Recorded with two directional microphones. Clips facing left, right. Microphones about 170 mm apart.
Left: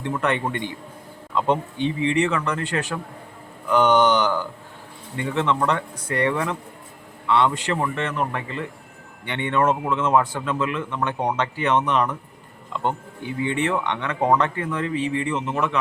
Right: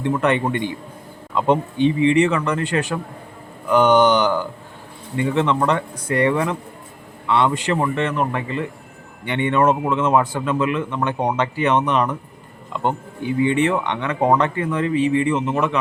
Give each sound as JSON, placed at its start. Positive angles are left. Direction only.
{"t": 0.0, "sound": "speech", "side_deg": -15}